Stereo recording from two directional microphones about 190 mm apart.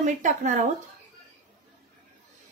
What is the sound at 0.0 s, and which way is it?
Speech, 40° right (ahead or behind).